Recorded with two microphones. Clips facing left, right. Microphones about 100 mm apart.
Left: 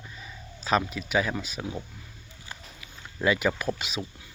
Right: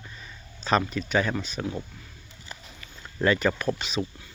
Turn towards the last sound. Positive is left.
turn(degrees=5)  # may be behind; listen again after turning